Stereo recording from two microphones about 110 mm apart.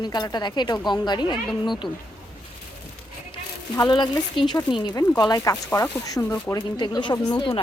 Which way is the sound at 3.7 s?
40° left (ahead or behind).